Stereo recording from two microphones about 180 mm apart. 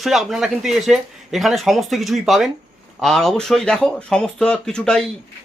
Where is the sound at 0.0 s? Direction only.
Centre (ahead or behind).